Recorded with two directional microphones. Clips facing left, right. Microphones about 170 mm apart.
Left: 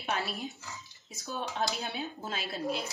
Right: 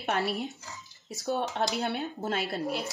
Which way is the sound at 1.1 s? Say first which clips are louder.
Right 6 dB; 70° right (ahead or behind).